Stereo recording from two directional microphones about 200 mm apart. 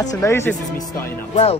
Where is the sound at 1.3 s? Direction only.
30° left (ahead or behind).